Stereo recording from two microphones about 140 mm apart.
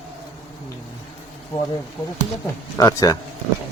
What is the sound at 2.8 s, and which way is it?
Speech, 25° left (ahead or behind).